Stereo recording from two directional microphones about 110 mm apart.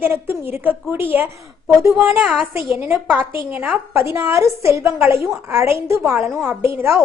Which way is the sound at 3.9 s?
25° right (ahead or behind).